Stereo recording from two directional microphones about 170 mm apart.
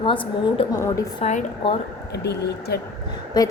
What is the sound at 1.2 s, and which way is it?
Speech, 40° left (ahead or behind).